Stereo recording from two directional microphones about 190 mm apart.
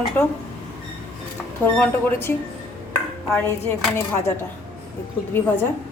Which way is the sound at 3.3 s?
10° left (ahead or behind).